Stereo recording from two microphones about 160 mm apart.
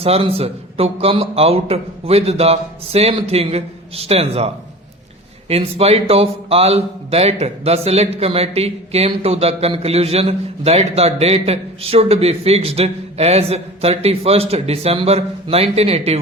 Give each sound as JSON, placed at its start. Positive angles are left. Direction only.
{"t": 0.0, "sound": "a man's voice", "side_deg": -40}